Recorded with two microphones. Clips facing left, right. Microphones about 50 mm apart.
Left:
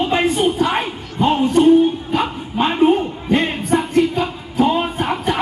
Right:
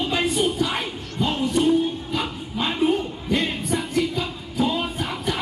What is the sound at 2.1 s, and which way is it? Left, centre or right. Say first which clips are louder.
Dog: left 7 dB; left.